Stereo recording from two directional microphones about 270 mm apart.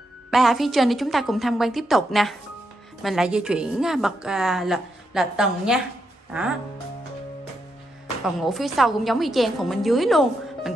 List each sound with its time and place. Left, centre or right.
0.3 s a woman's voice: centre
8.4 s a woman's voice: centre